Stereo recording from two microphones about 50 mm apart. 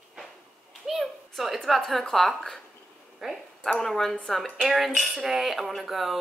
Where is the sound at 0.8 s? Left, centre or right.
Centre.